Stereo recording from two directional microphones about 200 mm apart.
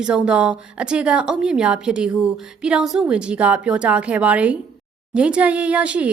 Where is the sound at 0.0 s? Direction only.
5° right (ahead or behind).